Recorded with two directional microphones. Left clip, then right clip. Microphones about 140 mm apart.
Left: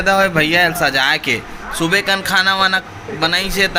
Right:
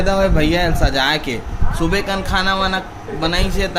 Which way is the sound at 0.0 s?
5° left (ahead or behind).